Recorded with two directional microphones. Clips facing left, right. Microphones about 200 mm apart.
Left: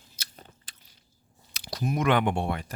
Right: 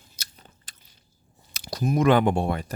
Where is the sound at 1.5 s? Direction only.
45° right (ahead or behind).